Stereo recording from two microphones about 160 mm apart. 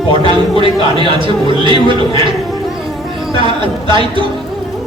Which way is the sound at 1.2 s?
30° right (ahead or behind).